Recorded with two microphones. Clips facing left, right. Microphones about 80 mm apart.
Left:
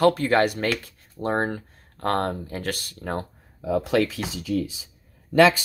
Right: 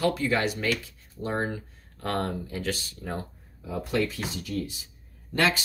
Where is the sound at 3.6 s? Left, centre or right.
Left.